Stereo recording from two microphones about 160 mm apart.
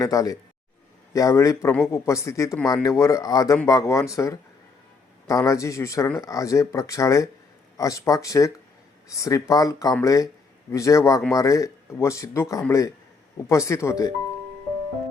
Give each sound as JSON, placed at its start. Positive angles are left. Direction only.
{"t": 0.0, "sound": "speech", "side_deg": 20}